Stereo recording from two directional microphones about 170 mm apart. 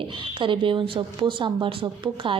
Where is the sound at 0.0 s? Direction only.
30° right (ahead or behind).